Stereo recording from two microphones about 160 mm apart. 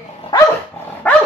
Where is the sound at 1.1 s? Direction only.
10° left (ahead or behind).